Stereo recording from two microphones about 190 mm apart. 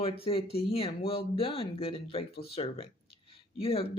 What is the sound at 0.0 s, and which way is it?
Speech, 30° left (ahead or behind).